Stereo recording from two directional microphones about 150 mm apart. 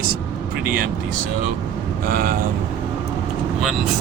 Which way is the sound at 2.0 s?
75° right (ahead or behind).